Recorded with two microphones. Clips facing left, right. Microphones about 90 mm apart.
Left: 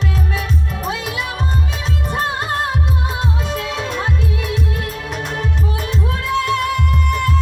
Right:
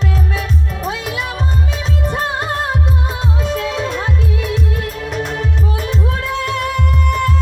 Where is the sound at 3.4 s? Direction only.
40° right (ahead or behind).